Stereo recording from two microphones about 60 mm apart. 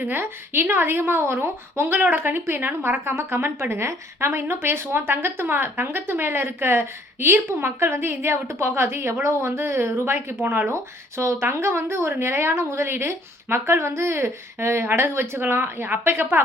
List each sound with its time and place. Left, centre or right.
0.0 s a woman's voice: right
10.4 s speech: right
11.2 s a woman's voice: right